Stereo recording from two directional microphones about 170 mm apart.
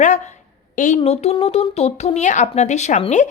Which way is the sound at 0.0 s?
45° left (ahead or behind).